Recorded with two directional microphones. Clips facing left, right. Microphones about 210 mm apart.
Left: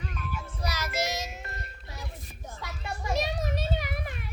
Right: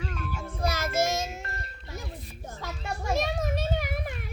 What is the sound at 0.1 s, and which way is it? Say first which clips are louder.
Child singing: right 3 dB; 50° right (ahead or behind).